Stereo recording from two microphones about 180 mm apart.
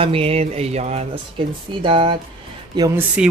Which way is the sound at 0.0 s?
30° right (ahead or behind).